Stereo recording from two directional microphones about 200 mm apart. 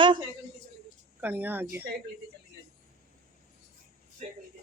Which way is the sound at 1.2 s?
10° right (ahead or behind).